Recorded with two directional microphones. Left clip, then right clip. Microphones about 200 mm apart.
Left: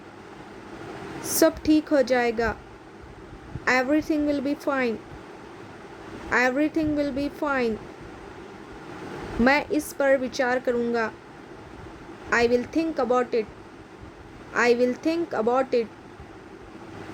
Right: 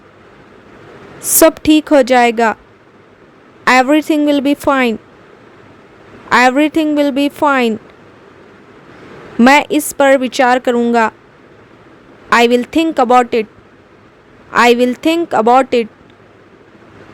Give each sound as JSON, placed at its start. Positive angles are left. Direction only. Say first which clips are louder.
{"t": 1.4, "sound": "a woman's voice", "louder": "right 11 dB", "side_deg": -55}
{"t": 3.6, "sound": "a woman's voice", "louder": "right 13 dB", "side_deg": -55}
{"t": 6.3, "sound": "a woman's voice", "louder": "right 13 dB", "side_deg": -50}
{"t": 9.4, "sound": "a woman's voice", "louder": "right 13 dB", "side_deg": -50}
{"t": 12.3, "sound": "a woman's voice", "louder": "right 12 dB", "side_deg": -55}
{"t": 14.5, "sound": "a woman's voice", "louder": "right 11 dB", "side_deg": -55}